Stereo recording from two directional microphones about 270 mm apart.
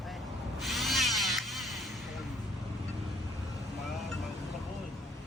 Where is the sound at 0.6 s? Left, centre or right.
Centre.